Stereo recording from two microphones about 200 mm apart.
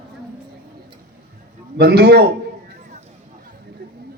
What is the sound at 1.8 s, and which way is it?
Speech, 55° right (ahead or behind).